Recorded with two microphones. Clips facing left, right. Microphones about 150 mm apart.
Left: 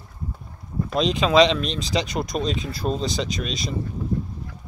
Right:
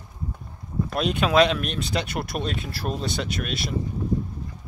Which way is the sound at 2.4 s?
60° right (ahead or behind).